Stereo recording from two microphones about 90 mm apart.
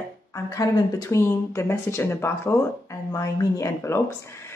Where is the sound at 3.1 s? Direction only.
40° left (ahead or behind).